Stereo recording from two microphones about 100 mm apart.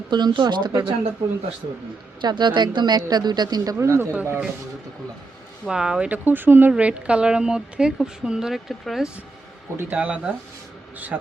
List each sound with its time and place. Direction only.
0.1 s a woman's voice: 50° right (ahead or behind)
2.2 s a woman's voice: 50° right (ahead or behind); by 4.1 s 30° right (ahead or behind)
4.1 s speech: 15° right (ahead or behind)
5.6 s speech: 5° right (ahead or behind)